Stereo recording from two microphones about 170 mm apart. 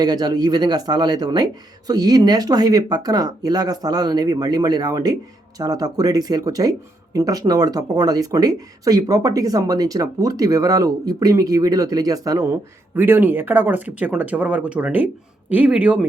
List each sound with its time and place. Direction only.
0.0 s speech: 25° right (ahead or behind); by 16.0 s 10° right (ahead or behind)